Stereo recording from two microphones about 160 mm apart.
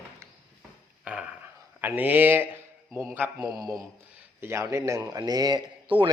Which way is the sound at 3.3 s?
25° right (ahead or behind).